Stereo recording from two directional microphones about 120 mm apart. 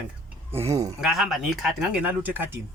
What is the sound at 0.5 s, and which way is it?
Speech, 25° right (ahead or behind).